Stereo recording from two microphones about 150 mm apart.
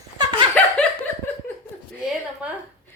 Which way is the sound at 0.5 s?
5° left (ahead or behind).